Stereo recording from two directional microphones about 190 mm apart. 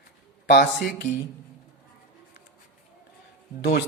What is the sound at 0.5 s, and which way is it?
Speech, 55° left (ahead or behind).